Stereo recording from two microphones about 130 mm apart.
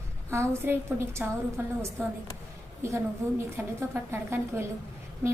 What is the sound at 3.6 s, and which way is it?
A woman's voice, 20° right (ahead or behind).